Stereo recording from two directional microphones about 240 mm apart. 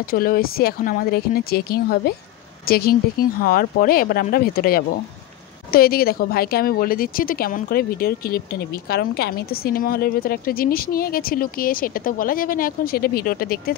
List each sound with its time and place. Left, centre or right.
0.1 s speech: left